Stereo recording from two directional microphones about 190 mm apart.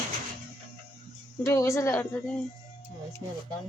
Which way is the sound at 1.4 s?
15° left (ahead or behind).